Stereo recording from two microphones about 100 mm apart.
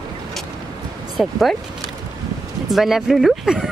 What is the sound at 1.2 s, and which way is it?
Speech, centre (ahead or behind).